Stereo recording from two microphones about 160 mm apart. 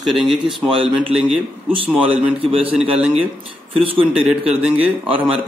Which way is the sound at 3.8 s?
35° right (ahead or behind).